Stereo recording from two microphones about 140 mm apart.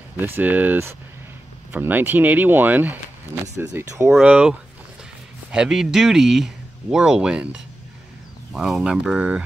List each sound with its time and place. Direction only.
0.2 s speech: 15° right (ahead or behind)
4.1 s speech: 5° right (ahead or behind)